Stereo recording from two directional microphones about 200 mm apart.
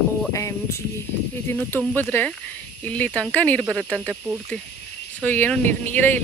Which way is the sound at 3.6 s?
5° right (ahead or behind).